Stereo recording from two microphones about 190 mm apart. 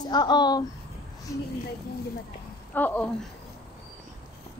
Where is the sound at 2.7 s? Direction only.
10° left (ahead or behind).